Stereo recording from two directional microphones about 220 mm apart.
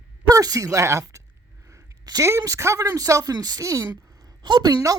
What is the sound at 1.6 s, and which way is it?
A man's voice, 15° right (ahead or behind).